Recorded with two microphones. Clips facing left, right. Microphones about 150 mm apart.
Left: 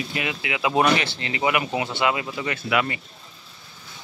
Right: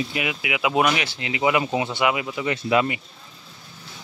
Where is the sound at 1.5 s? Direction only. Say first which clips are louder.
Right 2 dB; 25° right (ahead or behind).